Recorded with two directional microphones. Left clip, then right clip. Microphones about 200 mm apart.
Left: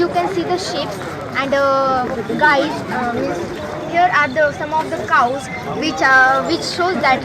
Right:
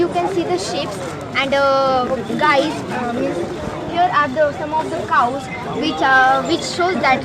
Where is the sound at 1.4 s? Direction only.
45° right (ahead or behind).